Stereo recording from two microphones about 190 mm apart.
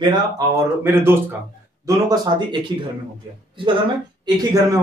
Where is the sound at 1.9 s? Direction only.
20° right (ahead or behind).